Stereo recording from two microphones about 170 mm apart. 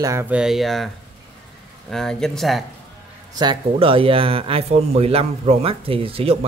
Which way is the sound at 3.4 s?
30° right (ahead or behind).